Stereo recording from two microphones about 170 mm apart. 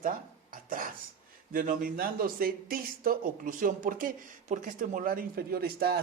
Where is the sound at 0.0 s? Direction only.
55° right (ahead or behind).